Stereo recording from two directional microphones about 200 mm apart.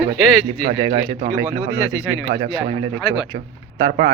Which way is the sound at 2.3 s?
25° right (ahead or behind).